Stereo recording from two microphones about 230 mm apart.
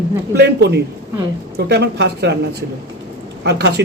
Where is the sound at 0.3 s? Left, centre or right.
Right.